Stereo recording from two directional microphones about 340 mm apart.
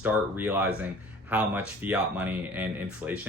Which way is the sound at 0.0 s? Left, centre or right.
Centre.